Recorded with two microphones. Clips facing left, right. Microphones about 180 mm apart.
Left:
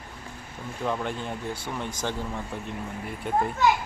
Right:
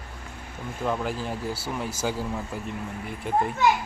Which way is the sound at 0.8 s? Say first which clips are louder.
Right 1 dB; 5° right (ahead or behind).